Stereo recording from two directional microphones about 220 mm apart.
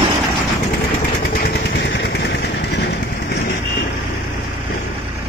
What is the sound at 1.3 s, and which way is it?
Vehicle, 45° left (ahead or behind).